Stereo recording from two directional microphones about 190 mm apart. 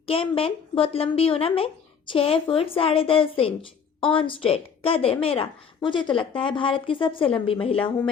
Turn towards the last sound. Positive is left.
turn(degrees=30)  # may be behind; listen again after turning